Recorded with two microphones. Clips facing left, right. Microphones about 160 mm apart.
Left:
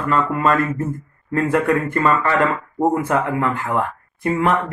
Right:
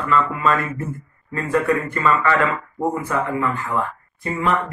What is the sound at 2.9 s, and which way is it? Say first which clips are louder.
Speech: left 3 dB; 70° left (ahead or behind).